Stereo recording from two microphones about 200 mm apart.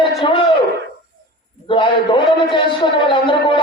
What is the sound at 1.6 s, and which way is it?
A man's voice, 25° left (ahead or behind).